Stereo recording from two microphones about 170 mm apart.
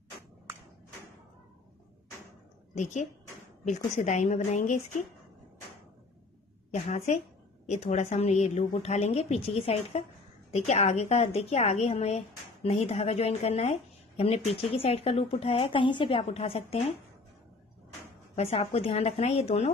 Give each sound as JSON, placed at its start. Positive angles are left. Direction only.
{"t": 2.7, "sound": "a woman's voice", "side_deg": 45}
{"t": 6.7, "sound": "speech", "side_deg": 40}
{"t": 18.3, "sound": "speech", "side_deg": 35}